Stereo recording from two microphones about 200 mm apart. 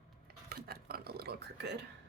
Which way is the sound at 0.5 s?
50° right (ahead or behind).